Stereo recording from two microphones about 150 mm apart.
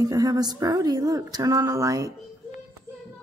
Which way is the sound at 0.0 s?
25° right (ahead or behind).